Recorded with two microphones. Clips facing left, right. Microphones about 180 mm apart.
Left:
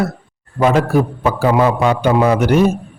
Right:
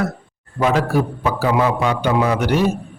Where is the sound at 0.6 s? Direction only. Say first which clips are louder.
Left 4 dB; 50° left (ahead or behind).